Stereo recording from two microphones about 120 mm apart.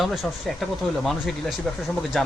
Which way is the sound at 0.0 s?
Centre (ahead or behind).